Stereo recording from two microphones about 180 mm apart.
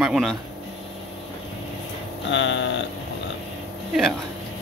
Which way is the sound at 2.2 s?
90° left.